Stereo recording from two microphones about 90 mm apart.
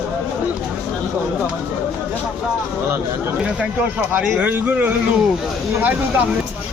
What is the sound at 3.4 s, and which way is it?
Speech, 15° right (ahead or behind).